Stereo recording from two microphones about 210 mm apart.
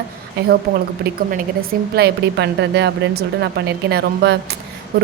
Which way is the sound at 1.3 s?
45° right (ahead or behind).